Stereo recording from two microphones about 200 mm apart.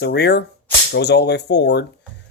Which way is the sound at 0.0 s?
55° left (ahead or behind).